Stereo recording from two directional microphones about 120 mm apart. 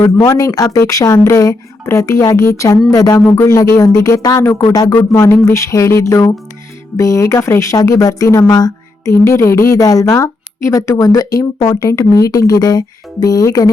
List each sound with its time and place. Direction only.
0.2 s speech: 25° left (ahead or behind)